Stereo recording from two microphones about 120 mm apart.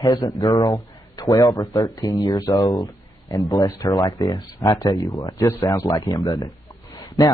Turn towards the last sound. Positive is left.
turn(degrees=30)  # may be behind; listen again after turning